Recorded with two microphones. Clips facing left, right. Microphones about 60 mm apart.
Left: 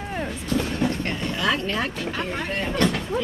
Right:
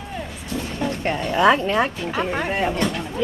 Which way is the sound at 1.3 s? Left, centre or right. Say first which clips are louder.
Right 9 dB; right.